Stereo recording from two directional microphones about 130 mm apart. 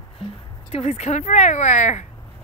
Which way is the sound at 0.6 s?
55° left (ahead or behind).